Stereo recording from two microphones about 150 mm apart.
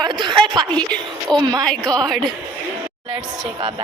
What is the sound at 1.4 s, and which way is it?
Speech, 25° right (ahead or behind).